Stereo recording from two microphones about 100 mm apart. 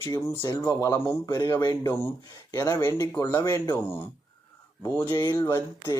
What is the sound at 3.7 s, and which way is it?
Speech, 20° left (ahead or behind).